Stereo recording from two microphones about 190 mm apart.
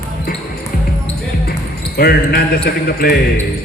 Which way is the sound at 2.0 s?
55° left (ahead or behind).